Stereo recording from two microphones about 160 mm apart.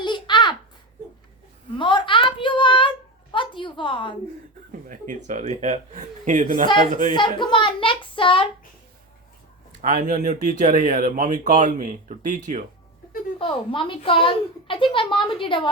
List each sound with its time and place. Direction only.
0.0 s a sound: 30° left (ahead or behind)
1.8 s a sound: 30° left (ahead or behind)
4.9 s speech: 55° right (ahead or behind)
7.1 s a woman's voice: 30° left (ahead or behind)
9.8 s speech: 55° right (ahead or behind)
13.4 s a woman's voice: 30° left (ahead or behind)